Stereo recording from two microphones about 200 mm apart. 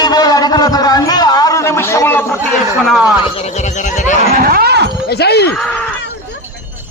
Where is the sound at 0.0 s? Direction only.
20° left (ahead or behind).